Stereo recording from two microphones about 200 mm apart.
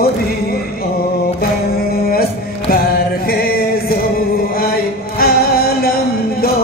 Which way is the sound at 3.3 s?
50° left (ahead or behind).